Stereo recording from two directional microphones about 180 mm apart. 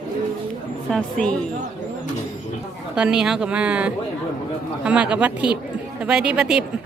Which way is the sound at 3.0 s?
5° right (ahead or behind).